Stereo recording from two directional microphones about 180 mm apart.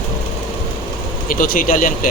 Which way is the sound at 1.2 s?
50° left (ahead or behind).